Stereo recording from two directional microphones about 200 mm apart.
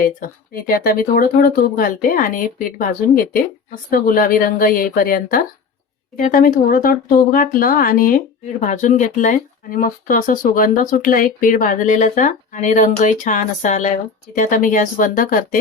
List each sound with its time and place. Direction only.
0.0 s speech: 45° left (ahead or behind)